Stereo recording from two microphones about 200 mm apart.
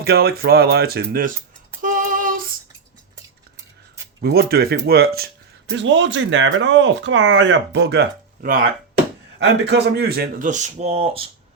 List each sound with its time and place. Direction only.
0.0 s speech: 50° right (ahead or behind)
1.8 s female singing: 40° right (ahead or behind)
4.2 s speech: 50° right (ahead or behind)
5.7 s speech: 65° right (ahead or behind); by 8.7 s 45° right (ahead or behind)
9.4 s speech: 60° right (ahead or behind); by 11.3 s 30° right (ahead or behind)